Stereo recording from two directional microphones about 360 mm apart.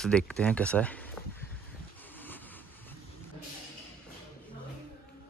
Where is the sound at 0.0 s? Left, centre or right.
Centre.